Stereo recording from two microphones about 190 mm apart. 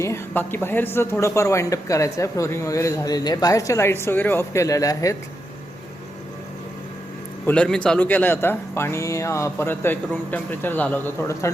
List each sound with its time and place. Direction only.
0.0 s a woman's voice: 15° left (ahead or behind)
7.4 s a man's voice: 5° left (ahead or behind)